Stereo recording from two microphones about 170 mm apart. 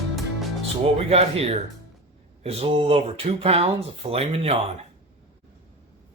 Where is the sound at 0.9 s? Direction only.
35° right (ahead or behind).